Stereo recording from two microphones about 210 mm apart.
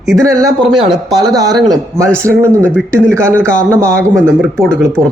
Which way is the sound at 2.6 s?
5° left (ahead or behind).